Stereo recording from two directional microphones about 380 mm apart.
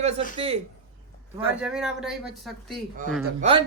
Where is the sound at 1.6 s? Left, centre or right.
Centre.